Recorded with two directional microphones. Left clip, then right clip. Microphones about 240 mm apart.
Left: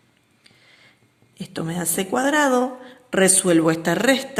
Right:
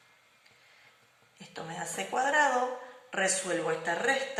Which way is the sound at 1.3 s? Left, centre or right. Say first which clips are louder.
Left 10 dB; left.